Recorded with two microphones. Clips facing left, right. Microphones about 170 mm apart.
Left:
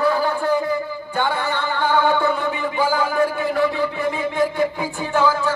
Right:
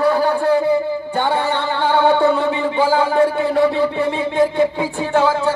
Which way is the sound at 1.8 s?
30° right (ahead or behind).